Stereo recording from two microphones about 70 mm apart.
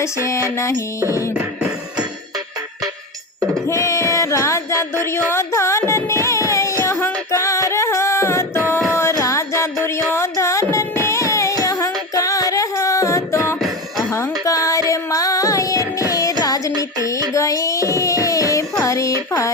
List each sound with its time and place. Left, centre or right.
0.0 s a sound: left
1.3 s music: centre
3.7 s music: left
10.3 s music: left
14.5 s music: left
17.3 s child singing: left